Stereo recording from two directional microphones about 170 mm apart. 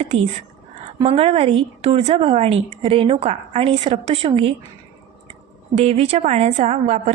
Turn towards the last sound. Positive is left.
turn(degrees=-40)  # may be behind; listen again after turning